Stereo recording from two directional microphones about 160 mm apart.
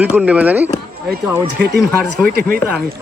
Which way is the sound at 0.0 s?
10° right (ahead or behind).